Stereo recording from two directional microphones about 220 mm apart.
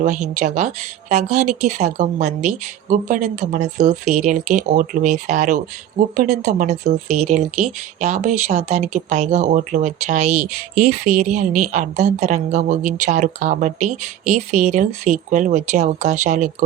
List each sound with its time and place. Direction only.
0.0 s speech: 35° right (ahead or behind)